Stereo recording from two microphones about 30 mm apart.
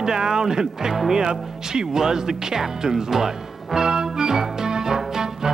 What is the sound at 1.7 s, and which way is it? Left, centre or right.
Music, right.